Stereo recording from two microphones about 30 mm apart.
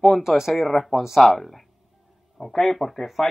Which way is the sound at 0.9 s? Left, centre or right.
Centre.